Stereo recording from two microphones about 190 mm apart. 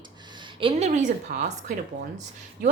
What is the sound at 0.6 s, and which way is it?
Speech, 35° right (ahead or behind).